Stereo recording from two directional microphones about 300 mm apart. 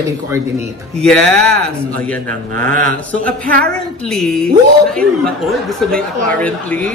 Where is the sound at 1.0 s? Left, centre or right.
Centre.